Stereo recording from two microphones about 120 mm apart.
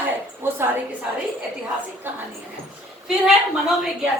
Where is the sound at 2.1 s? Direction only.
15° right (ahead or behind).